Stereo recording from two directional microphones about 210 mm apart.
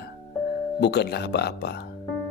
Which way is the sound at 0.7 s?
50° left (ahead or behind).